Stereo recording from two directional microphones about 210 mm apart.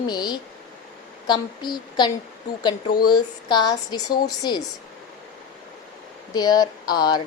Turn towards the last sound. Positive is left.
turn(degrees=20)  # may be behind; listen again after turning